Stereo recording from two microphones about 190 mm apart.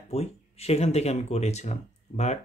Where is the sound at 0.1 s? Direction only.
35° left (ahead or behind).